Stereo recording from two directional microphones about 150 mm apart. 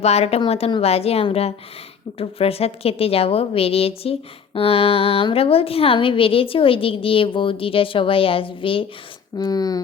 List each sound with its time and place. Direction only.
0.0 s a woman's voice: 45° left (ahead or behind)
9.4 s speech: 25° left (ahead or behind)